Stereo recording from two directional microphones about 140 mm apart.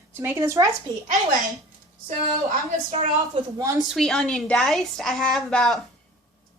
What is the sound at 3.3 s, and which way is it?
Speech, 25° right (ahead or behind).